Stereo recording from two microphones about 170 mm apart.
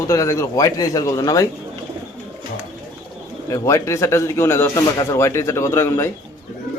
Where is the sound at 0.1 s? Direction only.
20° left (ahead or behind).